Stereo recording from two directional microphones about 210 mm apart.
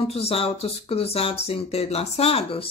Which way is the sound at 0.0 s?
30° left (ahead or behind).